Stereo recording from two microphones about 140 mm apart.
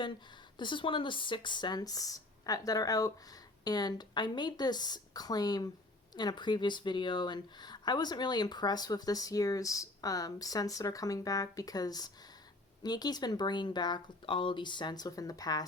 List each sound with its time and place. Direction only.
0.6 s speech: 35° left (ahead or behind)